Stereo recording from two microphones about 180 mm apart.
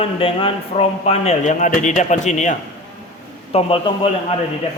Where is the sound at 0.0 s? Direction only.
30° left (ahead or behind).